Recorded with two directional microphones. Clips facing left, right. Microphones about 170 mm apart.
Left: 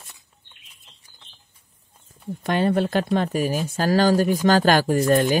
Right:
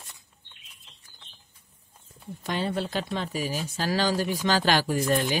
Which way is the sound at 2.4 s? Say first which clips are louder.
Left 8 dB; 55° left (ahead or behind).